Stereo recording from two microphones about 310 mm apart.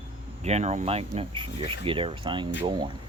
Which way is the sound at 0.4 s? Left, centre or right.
Right.